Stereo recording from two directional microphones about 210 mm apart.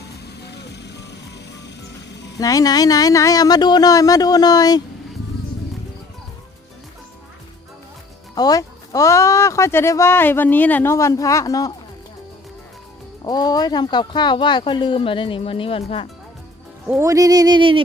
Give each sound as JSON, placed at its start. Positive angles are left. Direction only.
{"t": 0.4, "sound": "vehicle", "side_deg": 55}
{"t": 2.4, "sound": "speech", "side_deg": 15}
{"t": 8.4, "sound": "speech", "side_deg": 15}
{"t": 13.2, "sound": "speech", "side_deg": 20}
{"t": 16.8, "sound": "music", "side_deg": -5}
{"t": 17.1, "sound": "a sound", "side_deg": -15}